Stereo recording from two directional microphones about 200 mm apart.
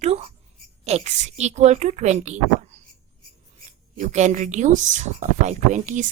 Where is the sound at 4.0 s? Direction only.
35° right (ahead or behind).